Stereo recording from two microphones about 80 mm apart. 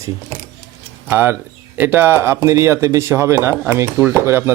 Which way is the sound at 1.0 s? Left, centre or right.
Right.